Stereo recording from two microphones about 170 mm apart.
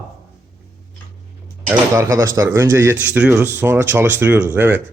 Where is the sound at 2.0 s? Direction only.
15° right (ahead or behind).